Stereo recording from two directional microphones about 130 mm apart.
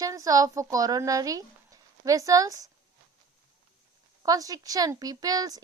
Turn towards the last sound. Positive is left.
turn(degrees=-30)  # may be behind; listen again after turning